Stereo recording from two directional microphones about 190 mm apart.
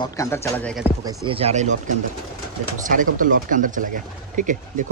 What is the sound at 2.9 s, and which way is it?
Speech, 45° right (ahead or behind).